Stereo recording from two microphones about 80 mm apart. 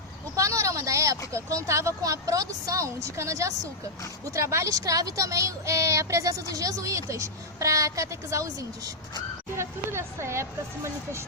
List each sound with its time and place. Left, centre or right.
0.3 s a sound: right
1.5 s a woman's voice: right
9.6 s a woman's voice: right